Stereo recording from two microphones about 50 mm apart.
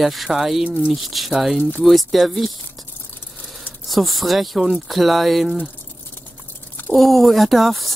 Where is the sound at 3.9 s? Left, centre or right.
Centre.